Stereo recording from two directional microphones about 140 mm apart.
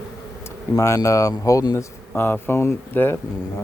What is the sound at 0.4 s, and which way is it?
Speech, 25° left (ahead or behind).